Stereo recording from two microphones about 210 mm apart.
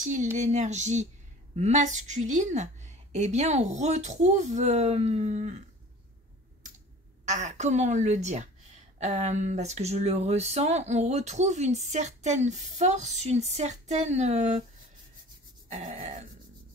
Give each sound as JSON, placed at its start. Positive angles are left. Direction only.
{"t": 0.0, "sound": "speech", "side_deg": -35}
{"t": 7.2, "sound": "speech", "side_deg": -35}
{"t": 15.7, "sound": "speech", "side_deg": -35}